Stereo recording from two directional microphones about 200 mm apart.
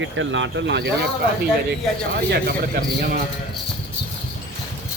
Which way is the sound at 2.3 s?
50° right (ahead or behind).